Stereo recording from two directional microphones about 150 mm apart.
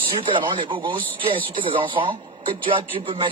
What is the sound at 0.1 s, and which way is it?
A man's voice, 35° right (ahead or behind).